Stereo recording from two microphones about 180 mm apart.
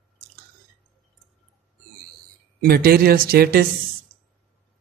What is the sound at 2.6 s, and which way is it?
A man's voice, 60° right (ahead or behind).